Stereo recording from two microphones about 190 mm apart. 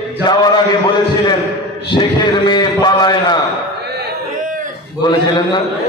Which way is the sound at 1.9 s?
25° left (ahead or behind).